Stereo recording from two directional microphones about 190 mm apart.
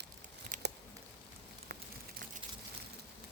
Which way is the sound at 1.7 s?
60° right (ahead or behind).